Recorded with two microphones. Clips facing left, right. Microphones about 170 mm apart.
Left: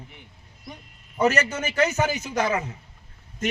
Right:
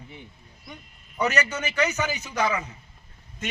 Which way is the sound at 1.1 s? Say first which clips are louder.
Left 3 dB; 45° left (ahead or behind).